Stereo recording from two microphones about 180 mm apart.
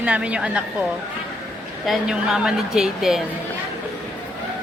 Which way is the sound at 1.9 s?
Centre (ahead or behind).